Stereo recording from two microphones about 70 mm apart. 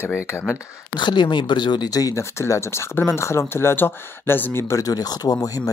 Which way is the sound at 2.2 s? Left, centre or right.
Left.